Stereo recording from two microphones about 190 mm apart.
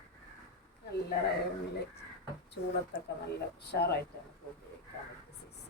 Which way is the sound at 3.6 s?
60° left (ahead or behind).